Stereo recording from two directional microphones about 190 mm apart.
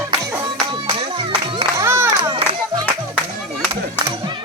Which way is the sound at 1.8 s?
15° right (ahead or behind).